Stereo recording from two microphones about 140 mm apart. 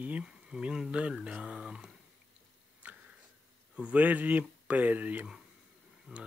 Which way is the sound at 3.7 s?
10° right (ahead or behind).